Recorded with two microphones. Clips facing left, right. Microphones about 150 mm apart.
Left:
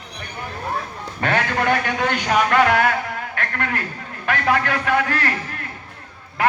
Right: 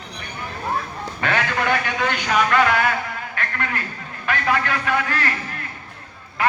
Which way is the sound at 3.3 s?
60° left (ahead or behind).